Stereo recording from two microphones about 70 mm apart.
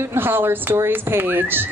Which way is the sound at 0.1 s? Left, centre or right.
Right.